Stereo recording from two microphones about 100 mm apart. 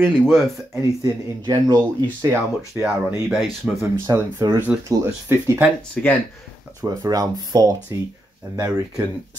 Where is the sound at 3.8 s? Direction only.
30° right (ahead or behind).